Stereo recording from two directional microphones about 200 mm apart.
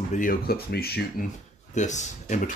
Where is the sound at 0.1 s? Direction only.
45° left (ahead or behind).